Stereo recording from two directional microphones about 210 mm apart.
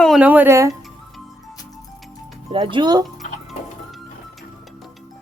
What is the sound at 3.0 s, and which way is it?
Music, centre (ahead or behind).